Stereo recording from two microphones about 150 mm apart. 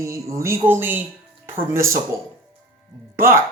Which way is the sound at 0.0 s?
20° right (ahead or behind).